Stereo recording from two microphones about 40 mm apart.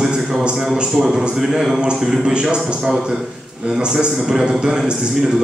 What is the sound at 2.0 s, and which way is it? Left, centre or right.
Speech, centre.